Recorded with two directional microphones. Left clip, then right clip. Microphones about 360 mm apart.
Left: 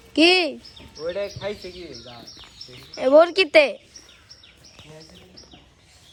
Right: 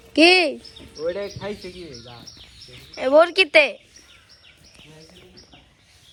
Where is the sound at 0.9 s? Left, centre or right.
Right.